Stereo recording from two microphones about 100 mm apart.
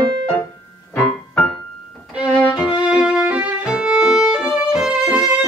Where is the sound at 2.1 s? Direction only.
15° right (ahead or behind).